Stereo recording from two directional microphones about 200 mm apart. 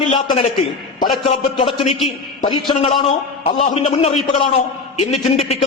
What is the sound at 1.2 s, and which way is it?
A man's voice, 25° left (ahead or behind).